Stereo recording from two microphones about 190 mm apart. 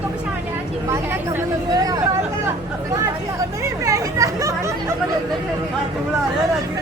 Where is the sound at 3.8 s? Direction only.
15° right (ahead or behind).